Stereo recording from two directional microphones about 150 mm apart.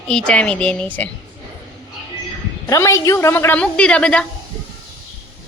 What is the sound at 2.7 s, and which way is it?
A woman's voice, 20° left (ahead or behind).